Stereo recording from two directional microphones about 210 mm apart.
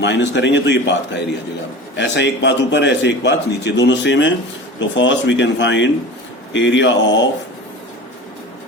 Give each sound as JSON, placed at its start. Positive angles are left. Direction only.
{"t": 0.0, "sound": "a man's voice", "side_deg": 55}